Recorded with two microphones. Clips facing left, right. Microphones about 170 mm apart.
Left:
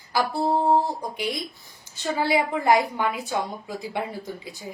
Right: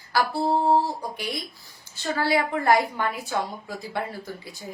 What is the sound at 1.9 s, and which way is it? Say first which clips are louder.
A woman's voice: left 1 dB; 20° left (ahead or behind).